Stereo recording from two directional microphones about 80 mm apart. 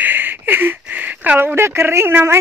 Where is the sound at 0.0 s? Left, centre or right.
Right.